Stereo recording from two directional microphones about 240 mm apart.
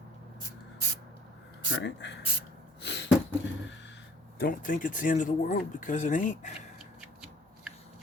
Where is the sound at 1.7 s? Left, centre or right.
Left.